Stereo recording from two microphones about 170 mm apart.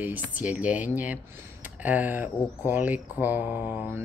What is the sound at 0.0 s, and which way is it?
Speech, 10° right (ahead or behind).